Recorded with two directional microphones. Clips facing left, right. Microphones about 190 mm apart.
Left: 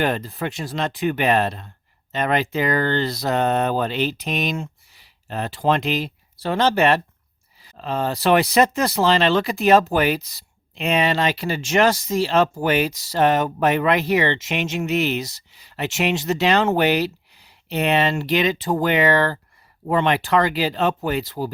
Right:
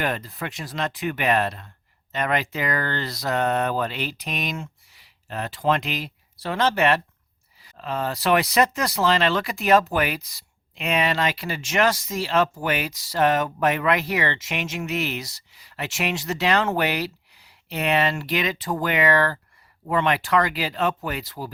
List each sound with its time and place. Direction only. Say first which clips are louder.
0.0 s speech: left 5 dB; 30° left (ahead or behind)